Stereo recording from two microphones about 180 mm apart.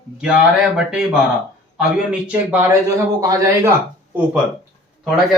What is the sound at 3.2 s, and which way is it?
Speech, 15° right (ahead or behind).